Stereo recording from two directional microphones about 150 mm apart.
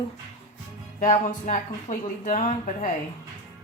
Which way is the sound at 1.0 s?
55° left (ahead or behind).